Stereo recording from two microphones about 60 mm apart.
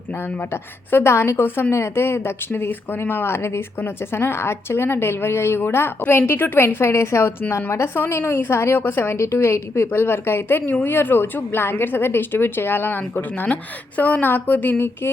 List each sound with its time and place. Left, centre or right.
0.5 s a woman's voice: left